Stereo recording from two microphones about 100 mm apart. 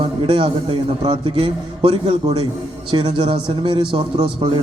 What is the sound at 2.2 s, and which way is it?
Speech, 45° right (ahead or behind).